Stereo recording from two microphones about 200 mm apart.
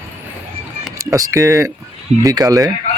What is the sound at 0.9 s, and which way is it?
Speech, 15° right (ahead or behind).